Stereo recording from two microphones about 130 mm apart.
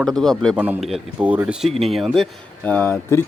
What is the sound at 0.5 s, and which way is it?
Speech, 10° right (ahead or behind).